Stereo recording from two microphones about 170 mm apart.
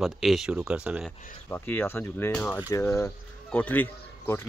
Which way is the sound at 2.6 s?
20° left (ahead or behind).